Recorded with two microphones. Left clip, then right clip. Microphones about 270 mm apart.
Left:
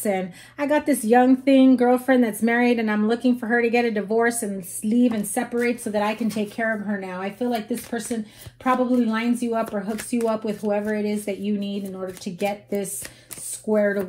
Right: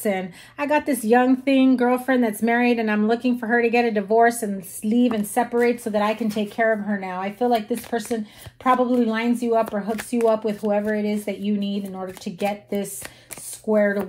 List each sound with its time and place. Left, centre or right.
0.0 s speech: right
8.6 s speech: right